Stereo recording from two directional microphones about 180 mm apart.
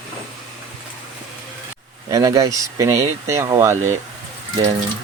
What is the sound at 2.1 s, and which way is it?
Speech, 20° right (ahead or behind).